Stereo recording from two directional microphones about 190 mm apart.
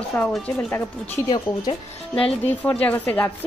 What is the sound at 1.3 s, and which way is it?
A woman's voice, 30° left (ahead or behind).